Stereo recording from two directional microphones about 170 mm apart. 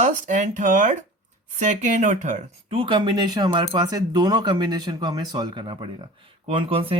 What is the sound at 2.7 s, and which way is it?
Speech, 30° right (ahead or behind).